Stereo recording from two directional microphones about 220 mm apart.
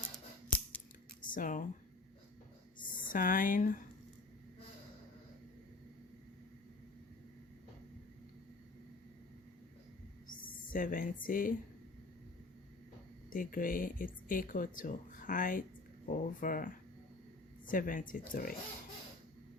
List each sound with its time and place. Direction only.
1.2 s speech: 35° left (ahead or behind)
2.7 s speech: 40° left (ahead or behind)
10.7 s speech: 40° left (ahead or behind)
13.3 s speech: 40° left (ahead or behind)